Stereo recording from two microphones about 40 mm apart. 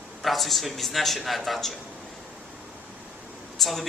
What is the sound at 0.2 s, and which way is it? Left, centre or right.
A man's voice, centre.